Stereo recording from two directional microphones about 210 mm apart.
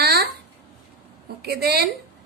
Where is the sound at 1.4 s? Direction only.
50° right (ahead or behind).